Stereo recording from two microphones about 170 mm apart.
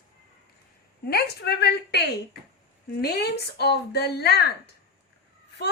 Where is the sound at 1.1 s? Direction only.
70° left (ahead or behind).